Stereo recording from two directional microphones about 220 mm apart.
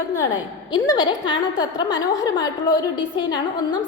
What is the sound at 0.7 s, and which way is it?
A woman's voice, 20° left (ahead or behind).